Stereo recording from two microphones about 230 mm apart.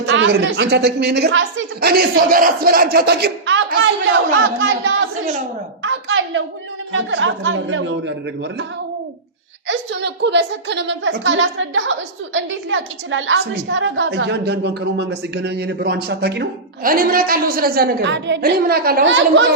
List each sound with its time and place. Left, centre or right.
0.0 s a woman's voice: right
5.8 s a sound: right
6.9 s a woman's voice: right
9.6 s a woman's voice: right